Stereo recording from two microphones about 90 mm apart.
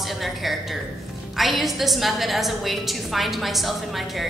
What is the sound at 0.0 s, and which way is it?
A woman's voice, centre (ahead or behind).